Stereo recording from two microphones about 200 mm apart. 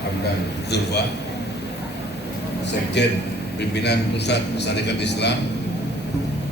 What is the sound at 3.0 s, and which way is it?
A man's voice, 60° left (ahead or behind).